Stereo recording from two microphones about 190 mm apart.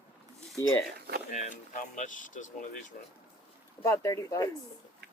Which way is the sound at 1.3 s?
40° left (ahead or behind).